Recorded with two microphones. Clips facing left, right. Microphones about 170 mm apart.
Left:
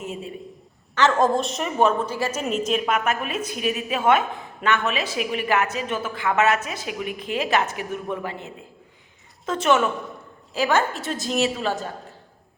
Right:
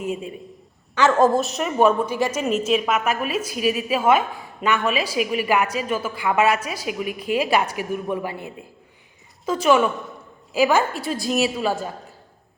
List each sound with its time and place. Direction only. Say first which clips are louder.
0.9 s a woman's voice: right 2 dB; 10° right (ahead or behind)
2.0 s a woman's voice: right 3 dB; 15° right (ahead or behind)